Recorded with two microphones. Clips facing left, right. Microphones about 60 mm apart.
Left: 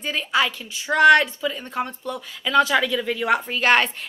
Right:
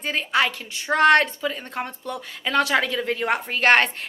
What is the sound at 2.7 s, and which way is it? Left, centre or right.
Speech, right.